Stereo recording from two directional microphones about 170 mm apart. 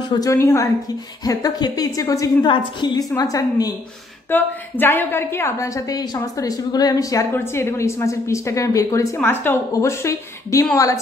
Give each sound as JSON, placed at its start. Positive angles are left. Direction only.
{"t": 0.1, "sound": "a woman's voice", "side_deg": 20}